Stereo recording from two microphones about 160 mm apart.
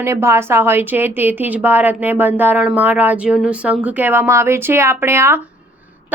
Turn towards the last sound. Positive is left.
turn(degrees=-15)  # may be behind; listen again after turning